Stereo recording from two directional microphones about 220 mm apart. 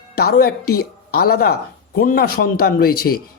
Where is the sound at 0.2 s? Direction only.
45° left (ahead or behind).